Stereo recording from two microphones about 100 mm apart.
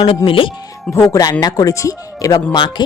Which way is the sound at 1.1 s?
40° left (ahead or behind).